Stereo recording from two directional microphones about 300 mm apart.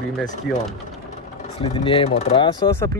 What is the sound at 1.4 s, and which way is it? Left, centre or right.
Speech, centre.